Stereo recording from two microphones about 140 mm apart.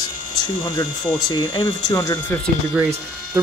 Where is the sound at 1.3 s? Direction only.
30° left (ahead or behind).